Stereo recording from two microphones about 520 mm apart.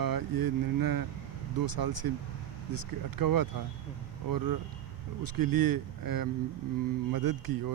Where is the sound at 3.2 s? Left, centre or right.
Right.